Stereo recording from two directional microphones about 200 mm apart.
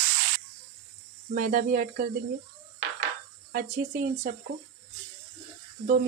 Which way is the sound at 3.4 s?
45° right (ahead or behind).